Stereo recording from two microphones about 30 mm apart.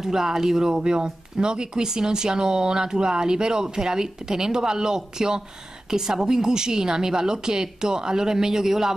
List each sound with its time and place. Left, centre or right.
0.0 s speech: centre